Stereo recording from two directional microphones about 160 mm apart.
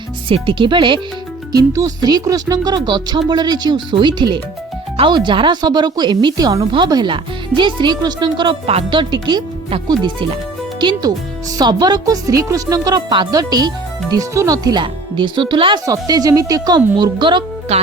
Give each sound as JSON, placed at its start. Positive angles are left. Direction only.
{"t": 0.3, "sound": "speech", "side_deg": -35}